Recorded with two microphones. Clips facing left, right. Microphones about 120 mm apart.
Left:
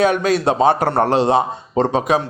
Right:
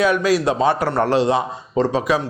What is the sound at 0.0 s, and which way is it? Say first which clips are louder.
Speech: left 1 dB; 25° left (ahead or behind).